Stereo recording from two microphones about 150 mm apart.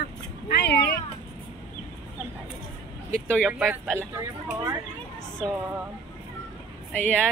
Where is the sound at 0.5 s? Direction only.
90° left.